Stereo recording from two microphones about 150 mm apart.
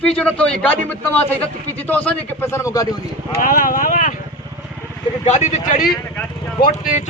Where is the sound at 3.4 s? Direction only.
65° left (ahead or behind).